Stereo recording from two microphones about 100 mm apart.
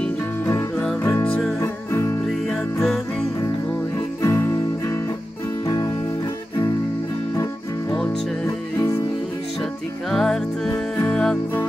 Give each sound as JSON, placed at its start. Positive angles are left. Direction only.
{"t": 1.6, "sound": "music", "side_deg": 25}
{"t": 2.5, "sound": "music", "side_deg": 5}
{"t": 4.2, "sound": "music", "side_deg": 25}
{"t": 8.5, "sound": "music", "side_deg": 25}
{"t": 10.1, "sound": "music", "side_deg": 5}